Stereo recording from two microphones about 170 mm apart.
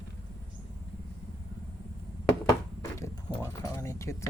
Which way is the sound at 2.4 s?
15° left (ahead or behind).